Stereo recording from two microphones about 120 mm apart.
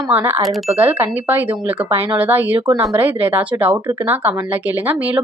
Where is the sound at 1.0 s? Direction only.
15° right (ahead or behind).